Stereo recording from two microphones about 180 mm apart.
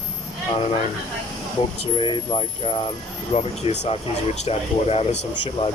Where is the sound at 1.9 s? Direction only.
25° left (ahead or behind).